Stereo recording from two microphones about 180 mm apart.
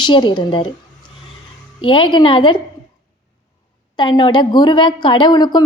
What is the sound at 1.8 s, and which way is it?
Speech, 25° left (ahead or behind).